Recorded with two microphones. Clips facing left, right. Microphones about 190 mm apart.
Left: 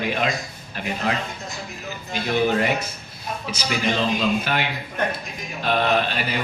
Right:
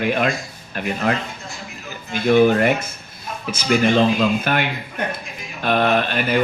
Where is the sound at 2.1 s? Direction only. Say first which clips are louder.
Right 7 dB; 55° right (ahead or behind).